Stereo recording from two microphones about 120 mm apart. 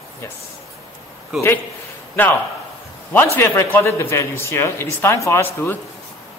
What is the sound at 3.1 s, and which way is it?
A man's voice, 20° left (ahead or behind).